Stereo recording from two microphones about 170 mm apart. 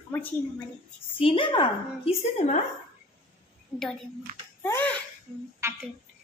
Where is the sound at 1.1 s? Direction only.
30° left (ahead or behind).